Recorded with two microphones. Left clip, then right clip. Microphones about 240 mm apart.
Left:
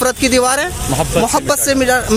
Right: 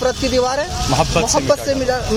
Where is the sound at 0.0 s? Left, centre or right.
Left.